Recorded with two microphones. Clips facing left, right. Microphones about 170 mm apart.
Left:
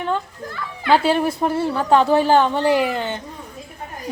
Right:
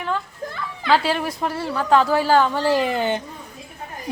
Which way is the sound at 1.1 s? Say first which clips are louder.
Left 5 dB; 25° left (ahead or behind).